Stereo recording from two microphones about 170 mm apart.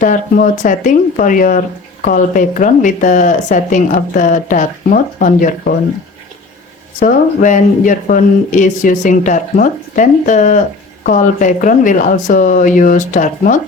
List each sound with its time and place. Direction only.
0.0 s speech: 50° left (ahead or behind)
7.0 s speech: 50° left (ahead or behind)